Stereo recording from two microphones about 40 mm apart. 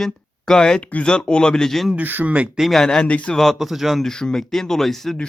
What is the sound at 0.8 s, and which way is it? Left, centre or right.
Speech, left.